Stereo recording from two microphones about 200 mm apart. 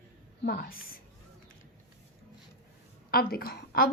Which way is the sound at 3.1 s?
50° left (ahead or behind).